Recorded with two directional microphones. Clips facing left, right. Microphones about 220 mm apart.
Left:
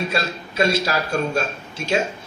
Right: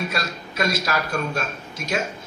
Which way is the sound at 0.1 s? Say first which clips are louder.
Left 4 dB; 30° left (ahead or behind).